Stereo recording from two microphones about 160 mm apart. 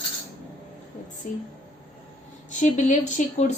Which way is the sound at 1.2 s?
55° left (ahead or behind).